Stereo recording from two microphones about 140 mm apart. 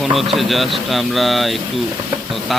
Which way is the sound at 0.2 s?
Centre (ahead or behind).